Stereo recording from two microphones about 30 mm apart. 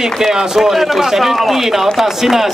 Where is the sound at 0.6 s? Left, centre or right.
Centre.